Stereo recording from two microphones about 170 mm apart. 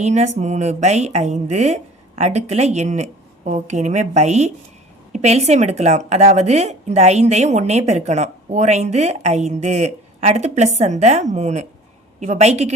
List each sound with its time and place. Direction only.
0.0 s speech: 40° right (ahead or behind)